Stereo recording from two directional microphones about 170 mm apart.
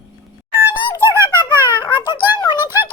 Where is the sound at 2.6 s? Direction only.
15° right (ahead or behind).